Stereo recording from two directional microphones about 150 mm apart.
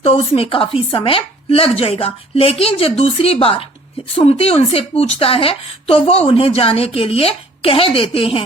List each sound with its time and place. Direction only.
0.0 s a woman's voice: 40° left (ahead or behind)